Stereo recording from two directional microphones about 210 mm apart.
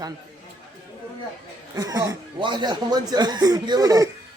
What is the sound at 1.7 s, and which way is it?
Speech, 15° right (ahead or behind).